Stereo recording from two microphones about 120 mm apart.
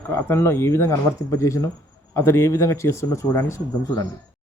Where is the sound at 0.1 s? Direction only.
20° left (ahead or behind).